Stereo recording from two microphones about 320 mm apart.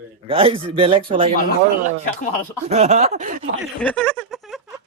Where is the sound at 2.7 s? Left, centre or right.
Centre.